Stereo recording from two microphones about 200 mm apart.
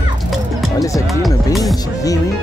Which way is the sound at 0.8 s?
15° left (ahead or behind).